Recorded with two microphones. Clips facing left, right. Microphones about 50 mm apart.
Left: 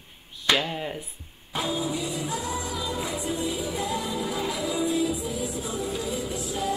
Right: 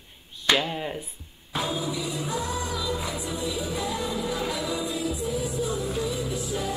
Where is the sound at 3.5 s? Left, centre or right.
Left.